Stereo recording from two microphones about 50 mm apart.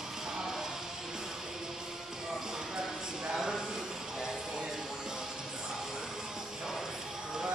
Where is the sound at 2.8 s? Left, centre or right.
Centre.